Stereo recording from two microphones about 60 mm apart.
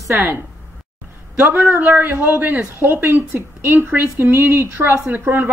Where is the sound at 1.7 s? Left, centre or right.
Right.